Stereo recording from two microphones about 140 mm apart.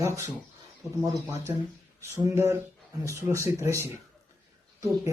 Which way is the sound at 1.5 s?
25° right (ahead or behind).